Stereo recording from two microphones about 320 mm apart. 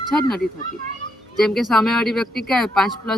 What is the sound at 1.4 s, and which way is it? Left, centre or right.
Speech, centre.